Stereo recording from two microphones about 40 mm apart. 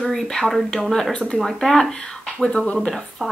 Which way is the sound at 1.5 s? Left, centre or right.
Centre.